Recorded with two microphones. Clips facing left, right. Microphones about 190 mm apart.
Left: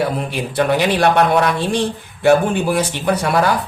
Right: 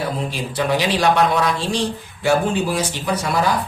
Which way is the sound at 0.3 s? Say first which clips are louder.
Left 4 dB; 60° left (ahead or behind).